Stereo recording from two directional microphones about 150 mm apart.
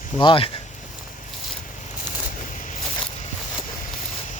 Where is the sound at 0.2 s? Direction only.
35° left (ahead or behind).